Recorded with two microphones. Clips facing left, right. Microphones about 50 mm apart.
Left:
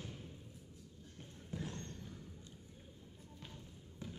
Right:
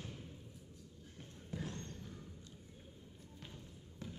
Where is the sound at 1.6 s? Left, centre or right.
Left.